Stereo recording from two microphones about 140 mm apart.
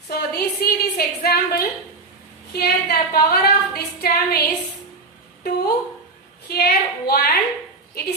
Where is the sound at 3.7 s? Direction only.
90° left.